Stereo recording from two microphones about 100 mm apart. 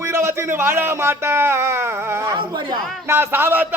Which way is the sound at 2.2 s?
45° right (ahead or behind).